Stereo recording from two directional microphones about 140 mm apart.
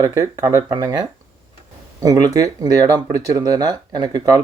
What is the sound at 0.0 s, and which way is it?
Speech, 25° right (ahead or behind).